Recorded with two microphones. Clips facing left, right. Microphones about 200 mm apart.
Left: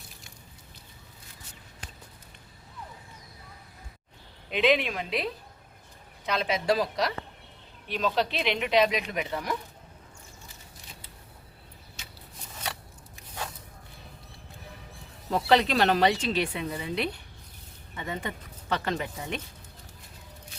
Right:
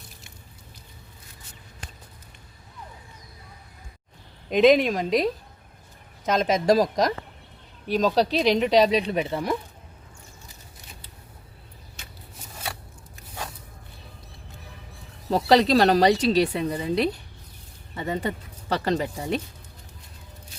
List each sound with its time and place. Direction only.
4.4 s a woman's voice: 40° right (ahead or behind)
15.3 s speech: 35° right (ahead or behind)